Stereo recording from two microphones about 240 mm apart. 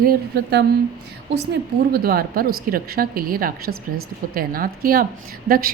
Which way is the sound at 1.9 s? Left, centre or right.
Right.